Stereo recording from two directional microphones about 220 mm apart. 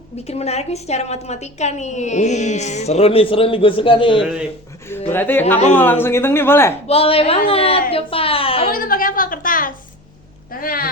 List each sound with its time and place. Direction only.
0.3 s a woman's voice: 30° left (ahead or behind)
4.2 s speech: centre (ahead or behind)
5.1 s speech: 10° left (ahead or behind)
6.8 s a woman's voice: 25° left (ahead or behind)
8.7 s a sound: 40° left (ahead or behind)
10.5 s speech: 40° left (ahead or behind)